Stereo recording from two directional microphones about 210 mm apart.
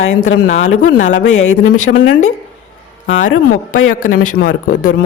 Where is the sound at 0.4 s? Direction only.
70° left (ahead or behind).